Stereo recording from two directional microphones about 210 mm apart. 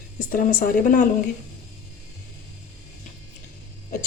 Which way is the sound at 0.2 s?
40° left (ahead or behind).